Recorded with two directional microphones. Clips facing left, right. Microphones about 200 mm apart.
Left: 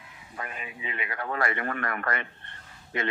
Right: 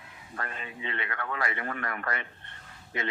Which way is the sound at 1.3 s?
50° left (ahead or behind).